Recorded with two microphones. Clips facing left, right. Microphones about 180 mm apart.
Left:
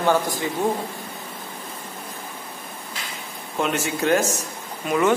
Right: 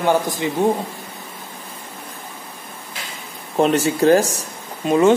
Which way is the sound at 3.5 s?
35° right (ahead or behind).